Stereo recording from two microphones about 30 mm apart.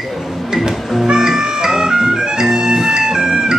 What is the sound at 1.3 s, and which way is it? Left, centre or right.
Music, right.